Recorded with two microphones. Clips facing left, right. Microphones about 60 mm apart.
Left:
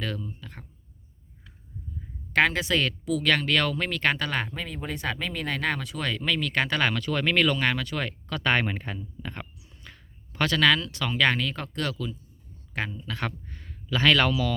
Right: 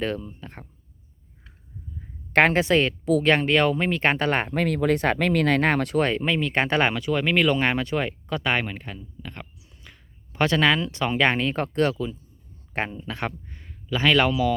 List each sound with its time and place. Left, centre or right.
0.0 s speech: right
2.3 s speech: right
4.5 s speech: right
6.0 s speech: right
6.9 s speech: centre
7.5 s speech: right
8.6 s a sound: centre
10.3 s speech: right